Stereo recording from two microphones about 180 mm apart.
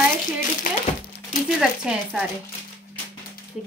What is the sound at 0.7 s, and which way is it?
Speech, 50° left (ahead or behind).